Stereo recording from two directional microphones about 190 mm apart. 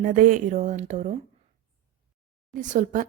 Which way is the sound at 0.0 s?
45° right (ahead or behind).